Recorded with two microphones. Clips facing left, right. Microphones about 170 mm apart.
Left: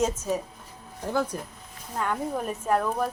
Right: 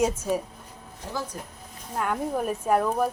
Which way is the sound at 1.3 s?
75° left (ahead or behind).